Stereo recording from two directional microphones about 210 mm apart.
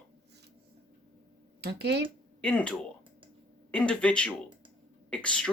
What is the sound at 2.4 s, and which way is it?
Speech, 5° left (ahead or behind).